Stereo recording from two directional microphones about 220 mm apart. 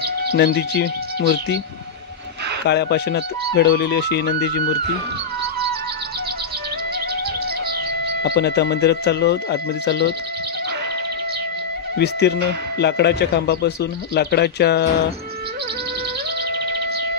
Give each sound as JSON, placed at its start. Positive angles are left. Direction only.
{"t": 0.3, "sound": "speech", "side_deg": 50}
{"t": 2.6, "sound": "speech", "side_deg": 50}
{"t": 8.2, "sound": "speech", "side_deg": 50}
{"t": 12.0, "sound": "speech", "side_deg": 50}